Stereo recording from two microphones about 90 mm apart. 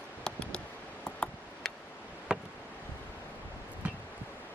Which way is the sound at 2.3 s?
10° right (ahead or behind).